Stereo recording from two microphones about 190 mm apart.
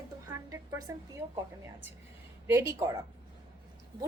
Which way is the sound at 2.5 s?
15° right (ahead or behind).